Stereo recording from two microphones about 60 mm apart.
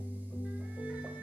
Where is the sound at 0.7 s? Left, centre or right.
Right.